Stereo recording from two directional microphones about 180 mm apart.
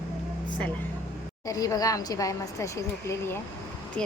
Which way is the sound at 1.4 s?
20° left (ahead or behind).